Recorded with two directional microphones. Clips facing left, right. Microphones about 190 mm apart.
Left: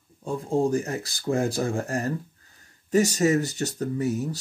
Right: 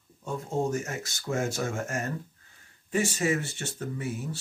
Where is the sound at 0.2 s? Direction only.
35° left (ahead or behind).